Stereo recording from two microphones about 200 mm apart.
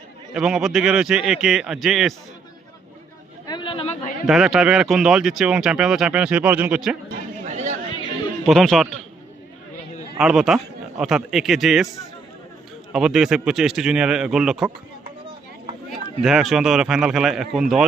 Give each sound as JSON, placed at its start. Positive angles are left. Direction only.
{"t": 0.3, "sound": "speech", "side_deg": -5}
{"t": 3.4, "sound": "a sound", "side_deg": 20}
{"t": 4.3, "sound": "speech", "side_deg": 0}
{"t": 7.5, "sound": "chatter", "side_deg": -35}
{"t": 8.4, "sound": "speech", "side_deg": 0}
{"t": 10.2, "sound": "speech", "side_deg": -5}
{"t": 12.9, "sound": "speech", "side_deg": -5}
{"t": 15.9, "sound": "speech", "side_deg": 0}